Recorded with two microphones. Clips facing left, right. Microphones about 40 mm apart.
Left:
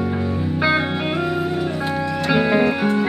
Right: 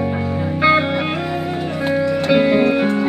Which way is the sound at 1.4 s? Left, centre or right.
Centre.